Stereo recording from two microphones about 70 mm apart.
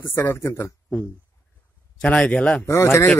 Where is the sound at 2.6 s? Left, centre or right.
Left.